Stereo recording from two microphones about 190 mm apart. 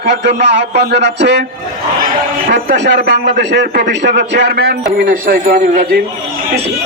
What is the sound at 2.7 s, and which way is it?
A man's voice, 65° right (ahead or behind).